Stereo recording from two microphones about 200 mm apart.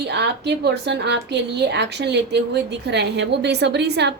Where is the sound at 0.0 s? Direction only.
55° right (ahead or behind).